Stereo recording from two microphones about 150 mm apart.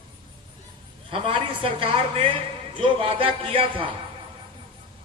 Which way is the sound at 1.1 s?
35° right (ahead or behind).